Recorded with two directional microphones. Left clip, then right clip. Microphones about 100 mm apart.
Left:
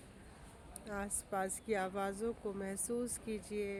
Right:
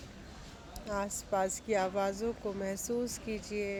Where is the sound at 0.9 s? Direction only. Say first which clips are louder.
Right 8 dB; 20° left (ahead or behind).